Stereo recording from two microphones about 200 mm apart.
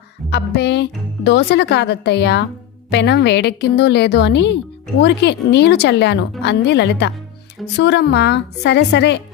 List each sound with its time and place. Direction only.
0.3 s speech: 55° left (ahead or behind)